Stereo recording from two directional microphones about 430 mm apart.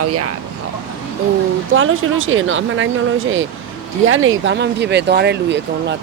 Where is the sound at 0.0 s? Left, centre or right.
Right.